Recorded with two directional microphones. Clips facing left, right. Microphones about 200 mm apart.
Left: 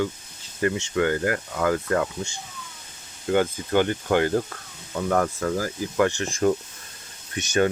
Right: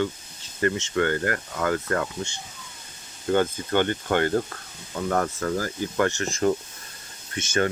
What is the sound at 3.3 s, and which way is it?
Speech, 10° left (ahead or behind).